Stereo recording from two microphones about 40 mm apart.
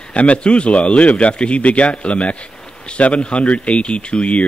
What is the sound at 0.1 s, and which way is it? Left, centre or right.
Speech, left.